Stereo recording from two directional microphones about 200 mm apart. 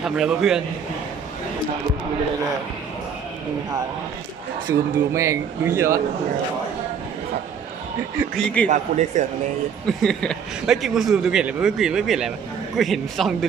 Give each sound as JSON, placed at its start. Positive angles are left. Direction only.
{"t": 0.0, "sound": "a man's voice", "side_deg": 0}
{"t": 4.7, "sound": "speech", "side_deg": -15}
{"t": 8.7, "sound": "speech", "side_deg": -35}
{"t": 9.8, "sound": "a man's voice", "side_deg": 5}